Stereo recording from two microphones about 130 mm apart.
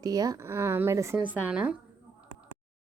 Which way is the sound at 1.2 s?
10° right (ahead or behind).